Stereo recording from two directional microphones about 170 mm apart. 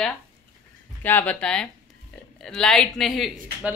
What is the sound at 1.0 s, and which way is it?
Speech, 10° left (ahead or behind).